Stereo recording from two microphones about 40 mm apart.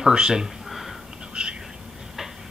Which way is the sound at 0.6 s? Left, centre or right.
Centre.